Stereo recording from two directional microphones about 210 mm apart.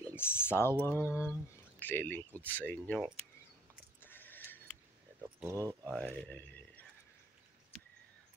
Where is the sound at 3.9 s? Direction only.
10° left (ahead or behind).